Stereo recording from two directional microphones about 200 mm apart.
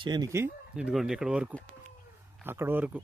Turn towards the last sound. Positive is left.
turn(degrees=-10)  # may be behind; listen again after turning